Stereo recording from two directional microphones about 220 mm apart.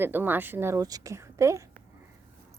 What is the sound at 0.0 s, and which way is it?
A woman's voice, 10° right (ahead or behind).